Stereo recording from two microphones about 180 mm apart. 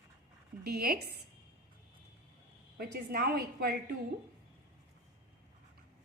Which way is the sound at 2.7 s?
65° right (ahead or behind).